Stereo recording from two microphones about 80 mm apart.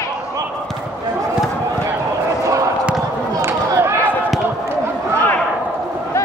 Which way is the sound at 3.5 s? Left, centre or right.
Right.